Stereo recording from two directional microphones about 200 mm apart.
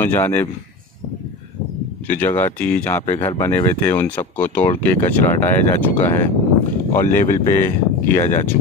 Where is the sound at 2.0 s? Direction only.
10° left (ahead or behind).